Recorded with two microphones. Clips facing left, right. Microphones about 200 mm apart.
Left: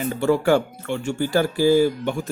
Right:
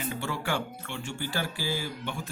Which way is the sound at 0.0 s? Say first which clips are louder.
Left 13 dB; 45° left (ahead or behind).